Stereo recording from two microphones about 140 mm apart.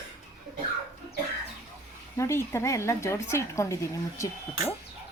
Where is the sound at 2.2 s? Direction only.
20° left (ahead or behind).